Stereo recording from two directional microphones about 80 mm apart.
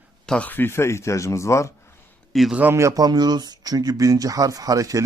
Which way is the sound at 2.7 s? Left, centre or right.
Right.